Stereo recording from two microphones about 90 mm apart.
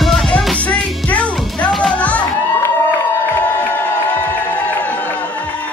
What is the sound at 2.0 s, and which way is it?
Music, 15° left (ahead or behind).